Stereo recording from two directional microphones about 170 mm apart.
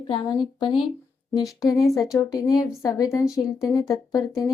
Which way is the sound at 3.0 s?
20° left (ahead or behind).